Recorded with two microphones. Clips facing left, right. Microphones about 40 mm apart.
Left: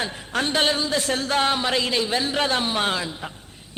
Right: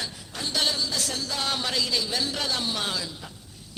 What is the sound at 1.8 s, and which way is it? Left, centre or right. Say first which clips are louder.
Speech: left 5 dB; left.